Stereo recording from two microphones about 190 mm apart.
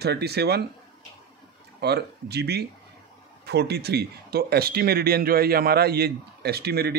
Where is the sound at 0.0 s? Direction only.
60° right (ahead or behind).